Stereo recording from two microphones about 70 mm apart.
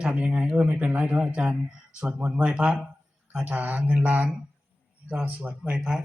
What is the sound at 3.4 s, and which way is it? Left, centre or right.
Mantra, right.